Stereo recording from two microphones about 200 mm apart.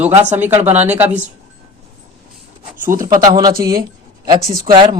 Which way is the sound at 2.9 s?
15° right (ahead or behind).